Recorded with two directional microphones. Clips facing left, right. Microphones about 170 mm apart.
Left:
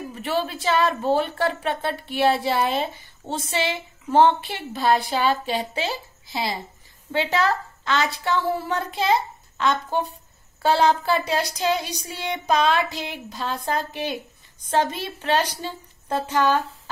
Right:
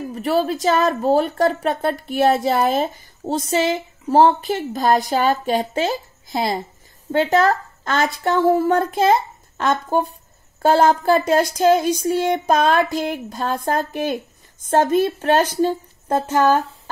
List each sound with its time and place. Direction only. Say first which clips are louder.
0.1 s a woman's voice: right 7 dB; 40° right (ahead or behind)